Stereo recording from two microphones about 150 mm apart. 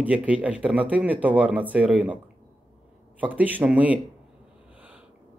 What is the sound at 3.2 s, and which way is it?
Speech, 10° right (ahead or behind).